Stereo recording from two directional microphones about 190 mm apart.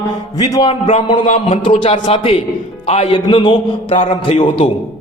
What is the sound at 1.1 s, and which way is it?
A man's voice, 35° left (ahead or behind).